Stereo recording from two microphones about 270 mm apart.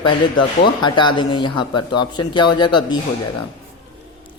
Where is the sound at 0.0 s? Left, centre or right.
Centre.